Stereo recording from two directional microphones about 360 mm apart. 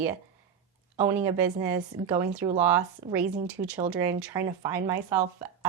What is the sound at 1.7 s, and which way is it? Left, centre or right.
Speech, centre.